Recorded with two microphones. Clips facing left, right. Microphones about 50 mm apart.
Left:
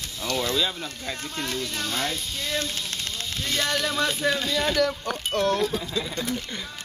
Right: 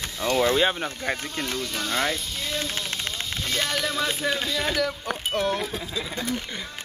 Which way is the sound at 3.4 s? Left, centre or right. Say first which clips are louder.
Left 1 dB; centre.